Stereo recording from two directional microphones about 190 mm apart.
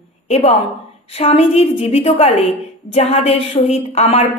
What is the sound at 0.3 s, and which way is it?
A woman's voice, 35° left (ahead or behind).